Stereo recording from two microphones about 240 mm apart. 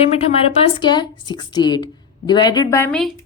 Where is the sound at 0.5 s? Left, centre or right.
Centre.